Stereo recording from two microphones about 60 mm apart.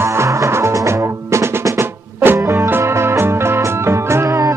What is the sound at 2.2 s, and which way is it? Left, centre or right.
Music, right.